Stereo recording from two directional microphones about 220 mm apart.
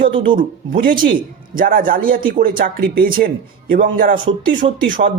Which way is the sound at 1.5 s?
40° right (ahead or behind).